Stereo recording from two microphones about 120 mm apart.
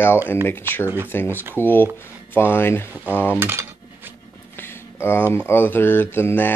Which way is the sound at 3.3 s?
20° right (ahead or behind).